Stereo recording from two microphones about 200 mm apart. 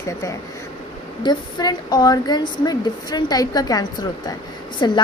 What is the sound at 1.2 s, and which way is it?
A woman's voice, 20° left (ahead or behind).